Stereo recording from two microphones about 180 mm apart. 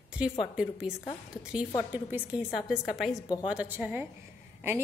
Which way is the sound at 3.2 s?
25° left (ahead or behind).